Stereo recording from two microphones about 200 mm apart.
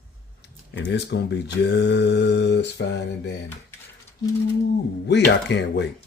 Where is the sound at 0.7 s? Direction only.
60° left (ahead or behind).